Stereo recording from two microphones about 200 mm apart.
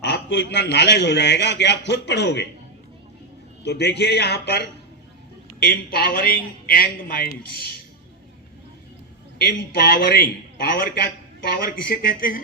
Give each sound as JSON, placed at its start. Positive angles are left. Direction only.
{"t": 0.0, "sound": "a man's voice", "side_deg": 60}
{"t": 3.6, "sound": "a man's voice", "side_deg": 55}
{"t": 9.4, "sound": "a man's voice", "side_deg": 55}